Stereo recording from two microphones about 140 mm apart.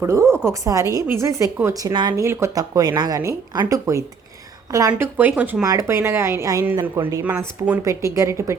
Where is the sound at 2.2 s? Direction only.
20° right (ahead or behind).